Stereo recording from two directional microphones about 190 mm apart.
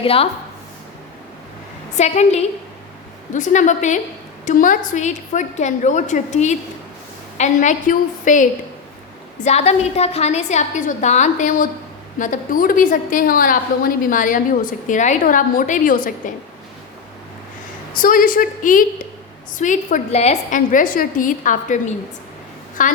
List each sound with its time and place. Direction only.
0.0 s a woman's voice: 30° left (ahead or behind)
2.0 s a woman's voice: 35° left (ahead or behind)
17.9 s a woman's voice: 45° left (ahead or behind)